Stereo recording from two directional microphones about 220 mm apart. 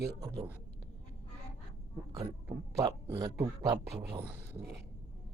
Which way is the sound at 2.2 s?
15° right (ahead or behind).